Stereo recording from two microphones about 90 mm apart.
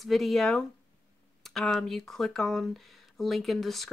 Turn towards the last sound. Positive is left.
turn(degrees=0)  # may be behind; listen again after turning